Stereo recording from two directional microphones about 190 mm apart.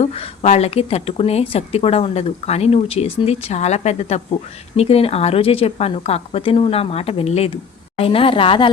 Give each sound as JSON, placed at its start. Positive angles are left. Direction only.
{"t": 0.0, "sound": "speech", "side_deg": 35}